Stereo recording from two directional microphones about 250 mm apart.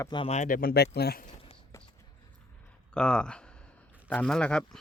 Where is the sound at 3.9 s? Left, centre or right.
Centre.